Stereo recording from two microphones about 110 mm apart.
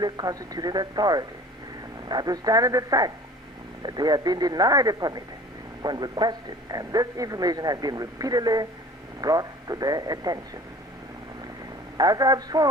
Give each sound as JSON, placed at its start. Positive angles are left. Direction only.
{"t": 0.0, "sound": "a man's voice", "side_deg": -35}
{"t": 12.0, "sound": "a man's voice", "side_deg": -35}